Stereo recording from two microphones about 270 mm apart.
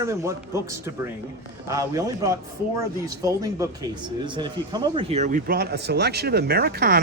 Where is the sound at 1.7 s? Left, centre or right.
Centre.